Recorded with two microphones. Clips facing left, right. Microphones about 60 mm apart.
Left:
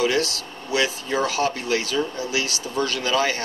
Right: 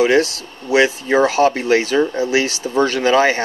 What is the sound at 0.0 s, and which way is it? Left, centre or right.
Speech, right.